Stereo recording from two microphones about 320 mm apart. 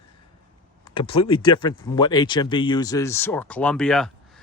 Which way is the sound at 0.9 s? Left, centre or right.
Centre.